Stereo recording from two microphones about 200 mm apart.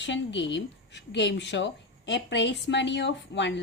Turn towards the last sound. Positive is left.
turn(degrees=60)  # may be behind; listen again after turning